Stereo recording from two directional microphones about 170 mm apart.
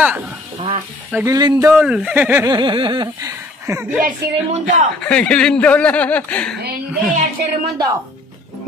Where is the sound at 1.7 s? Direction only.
5° right (ahead or behind).